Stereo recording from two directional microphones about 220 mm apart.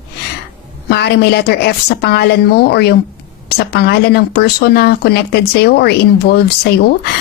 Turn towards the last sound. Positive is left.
turn(degrees=45)  # may be behind; listen again after turning